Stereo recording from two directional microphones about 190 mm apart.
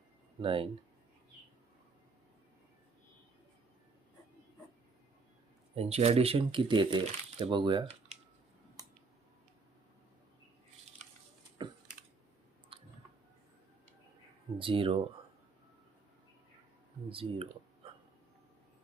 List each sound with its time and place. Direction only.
0.4 s speech: 30° right (ahead or behind)
5.7 s speech: 30° right (ahead or behind)
11.6 s typing: 25° right (ahead or behind)
12.7 s clicking: 30° right (ahead or behind)
14.6 s speech: 30° right (ahead or behind)
17.1 s speech: 30° right (ahead or behind)